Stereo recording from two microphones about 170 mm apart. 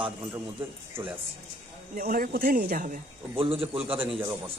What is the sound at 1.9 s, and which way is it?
Speech, 60° right (ahead or behind).